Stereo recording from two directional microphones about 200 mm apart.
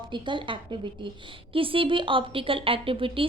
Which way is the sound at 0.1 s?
25° right (ahead or behind).